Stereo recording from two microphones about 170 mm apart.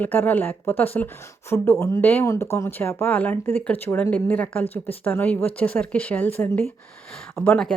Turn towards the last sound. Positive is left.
turn(degrees=5)  # may be behind; listen again after turning